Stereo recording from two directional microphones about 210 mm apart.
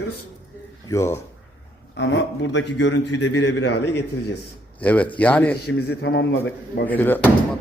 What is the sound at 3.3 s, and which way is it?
Speech, 55° left (ahead or behind).